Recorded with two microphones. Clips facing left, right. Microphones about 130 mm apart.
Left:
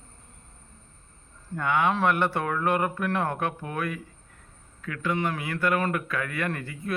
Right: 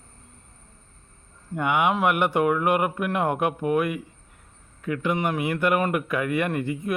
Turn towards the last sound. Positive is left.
turn(degrees=-20)  # may be behind; listen again after turning